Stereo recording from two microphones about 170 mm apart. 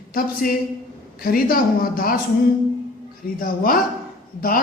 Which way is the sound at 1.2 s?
60° left (ahead or behind).